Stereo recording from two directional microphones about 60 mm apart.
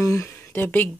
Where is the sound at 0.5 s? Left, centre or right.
Left.